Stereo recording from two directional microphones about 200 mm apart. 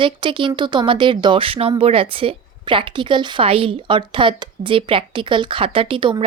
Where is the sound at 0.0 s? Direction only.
25° right (ahead or behind).